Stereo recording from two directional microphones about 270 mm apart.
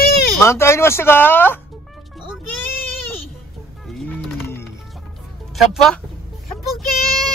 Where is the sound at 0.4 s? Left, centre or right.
Centre.